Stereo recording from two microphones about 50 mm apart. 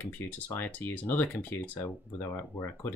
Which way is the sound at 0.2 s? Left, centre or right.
Left.